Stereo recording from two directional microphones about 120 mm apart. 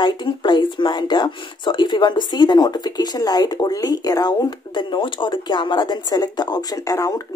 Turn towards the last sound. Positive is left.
turn(degrees=30)  # may be behind; listen again after turning